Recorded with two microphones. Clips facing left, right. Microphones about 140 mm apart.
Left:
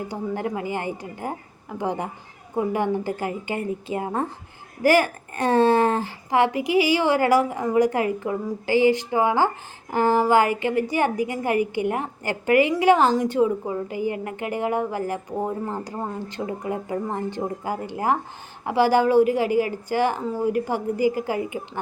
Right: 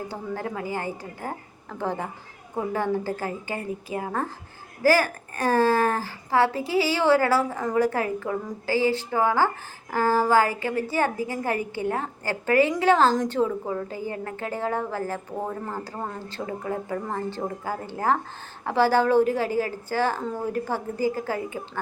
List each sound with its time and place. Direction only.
0.1 s a woman's voice: 20° left (ahead or behind)